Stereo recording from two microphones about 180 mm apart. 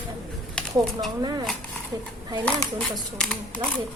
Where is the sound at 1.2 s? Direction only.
25° right (ahead or behind).